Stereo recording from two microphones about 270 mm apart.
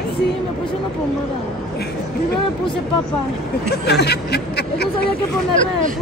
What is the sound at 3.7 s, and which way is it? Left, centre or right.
Speech, left.